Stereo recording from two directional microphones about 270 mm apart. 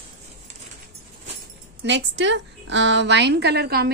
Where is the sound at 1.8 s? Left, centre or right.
Right.